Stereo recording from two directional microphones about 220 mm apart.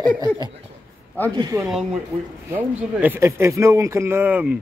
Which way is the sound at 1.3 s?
15° right (ahead or behind).